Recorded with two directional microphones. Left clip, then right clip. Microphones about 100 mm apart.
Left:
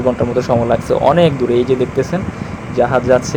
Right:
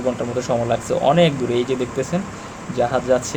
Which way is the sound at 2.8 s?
45° left (ahead or behind).